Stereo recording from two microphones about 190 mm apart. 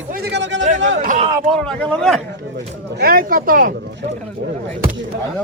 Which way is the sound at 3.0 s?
50° right (ahead or behind).